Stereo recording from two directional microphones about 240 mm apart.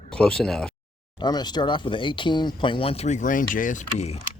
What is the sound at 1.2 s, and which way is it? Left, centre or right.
Speech, centre.